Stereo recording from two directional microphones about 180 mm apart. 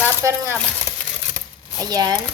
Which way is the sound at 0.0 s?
15° right (ahead or behind).